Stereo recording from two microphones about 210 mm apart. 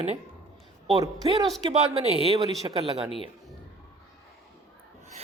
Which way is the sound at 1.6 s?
30° right (ahead or behind).